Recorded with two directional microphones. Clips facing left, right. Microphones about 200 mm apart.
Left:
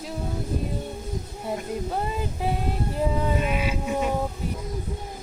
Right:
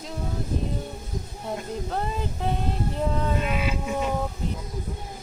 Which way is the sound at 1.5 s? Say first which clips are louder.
Left 2 dB; 5° left (ahead or behind).